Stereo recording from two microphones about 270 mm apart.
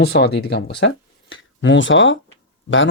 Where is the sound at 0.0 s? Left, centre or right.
Left.